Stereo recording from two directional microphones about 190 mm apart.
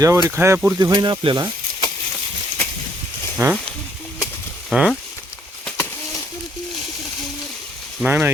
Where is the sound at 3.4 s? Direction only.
15° right (ahead or behind).